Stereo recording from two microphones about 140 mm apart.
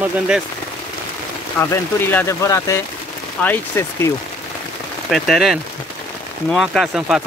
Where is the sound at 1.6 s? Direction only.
15° left (ahead or behind).